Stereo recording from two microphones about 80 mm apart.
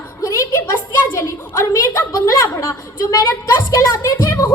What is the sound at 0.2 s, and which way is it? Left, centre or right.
A woman's voice, left.